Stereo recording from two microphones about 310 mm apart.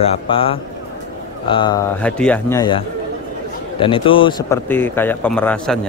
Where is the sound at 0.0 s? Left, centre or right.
Centre.